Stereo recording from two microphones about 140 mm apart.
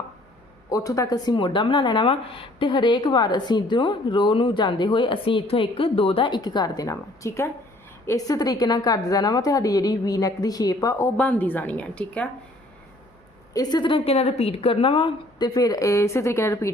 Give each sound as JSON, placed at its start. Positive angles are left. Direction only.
{"t": 0.7, "sound": "a woman's voice", "side_deg": 25}
{"t": 13.5, "sound": "a woman's voice", "side_deg": 30}